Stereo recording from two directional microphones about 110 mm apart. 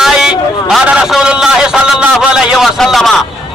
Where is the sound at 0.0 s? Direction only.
5° right (ahead or behind).